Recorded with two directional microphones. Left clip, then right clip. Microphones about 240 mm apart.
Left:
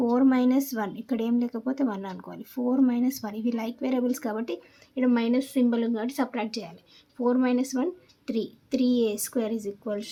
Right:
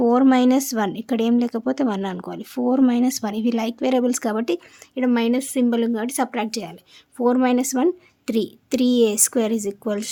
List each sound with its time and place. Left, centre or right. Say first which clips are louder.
0.0 s speech: right 7 dB; right